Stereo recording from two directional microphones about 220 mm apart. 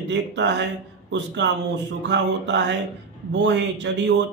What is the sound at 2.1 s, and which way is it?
A man's voice, 55° right (ahead or behind).